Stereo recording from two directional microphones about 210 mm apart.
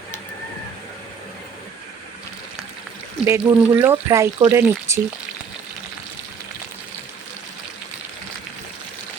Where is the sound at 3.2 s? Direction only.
10° right (ahead or behind).